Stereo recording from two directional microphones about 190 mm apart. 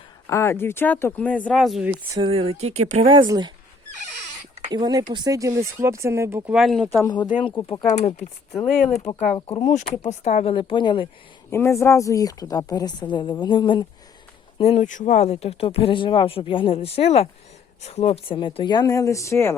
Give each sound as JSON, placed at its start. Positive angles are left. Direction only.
{"t": 0.3, "sound": "speech", "side_deg": 15}
{"t": 2.1, "sound": "speech", "side_deg": -30}
{"t": 3.1, "sound": "speech", "side_deg": -25}
{"t": 4.7, "sound": "speech", "side_deg": -20}
{"t": 6.5, "sound": "speech", "side_deg": 0}
{"t": 7.7, "sound": "speech", "side_deg": 30}
{"t": 8.6, "sound": "speech", "side_deg": 5}
{"t": 9.5, "sound": "a woman's voice", "side_deg": 25}
{"t": 11.5, "sound": "a woman's voice", "side_deg": 15}
{"t": 14.6, "sound": "a woman's voice", "side_deg": 35}